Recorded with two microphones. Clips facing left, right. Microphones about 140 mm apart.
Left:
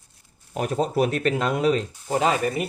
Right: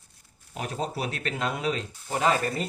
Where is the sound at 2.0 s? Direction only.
30° left (ahead or behind).